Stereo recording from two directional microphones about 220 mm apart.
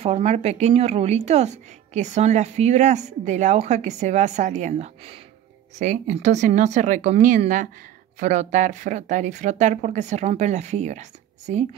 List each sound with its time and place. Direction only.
0.0 s a woman's voice: 30° right (ahead or behind)